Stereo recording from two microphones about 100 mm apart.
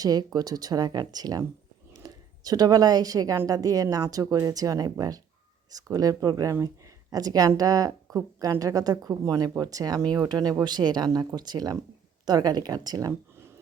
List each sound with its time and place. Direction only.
0.0 s speech: 40° right (ahead or behind)